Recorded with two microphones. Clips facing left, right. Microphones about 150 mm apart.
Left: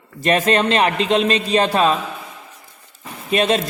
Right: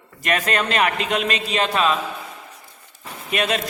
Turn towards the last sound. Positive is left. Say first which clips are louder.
# left 5 dB
turn(degrees=30)  # may be behind; listen again after turning